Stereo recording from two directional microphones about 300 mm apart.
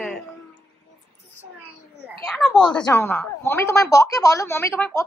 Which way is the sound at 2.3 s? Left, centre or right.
Centre.